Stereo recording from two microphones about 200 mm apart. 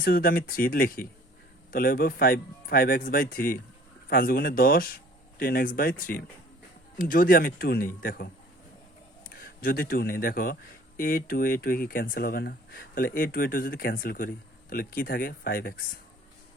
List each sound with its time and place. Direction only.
0.0 s speech: 45° left (ahead or behind)
9.3 s speech: 45° left (ahead or behind)